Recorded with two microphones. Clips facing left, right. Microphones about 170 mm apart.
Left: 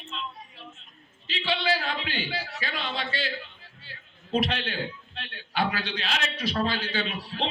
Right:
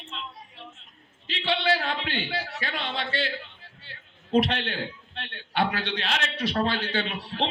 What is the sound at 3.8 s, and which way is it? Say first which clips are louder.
A man's voice: left 2 dB; 65° right (ahead or behind).